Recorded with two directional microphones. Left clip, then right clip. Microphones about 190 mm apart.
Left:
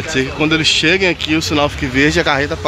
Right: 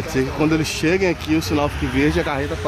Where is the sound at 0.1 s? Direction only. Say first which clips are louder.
Left 4 dB; centre (ahead or behind).